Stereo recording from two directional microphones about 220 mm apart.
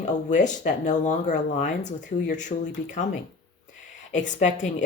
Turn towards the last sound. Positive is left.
turn(degrees=35)  # may be behind; listen again after turning